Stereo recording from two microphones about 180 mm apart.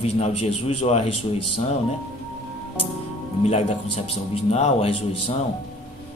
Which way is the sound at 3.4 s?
35° left (ahead or behind).